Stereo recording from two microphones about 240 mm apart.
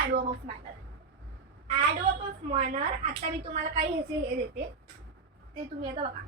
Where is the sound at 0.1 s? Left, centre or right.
Right.